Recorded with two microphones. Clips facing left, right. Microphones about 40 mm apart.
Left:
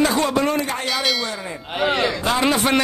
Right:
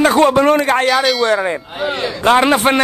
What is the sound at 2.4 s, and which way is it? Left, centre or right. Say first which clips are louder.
Speech: right 3 dB; right.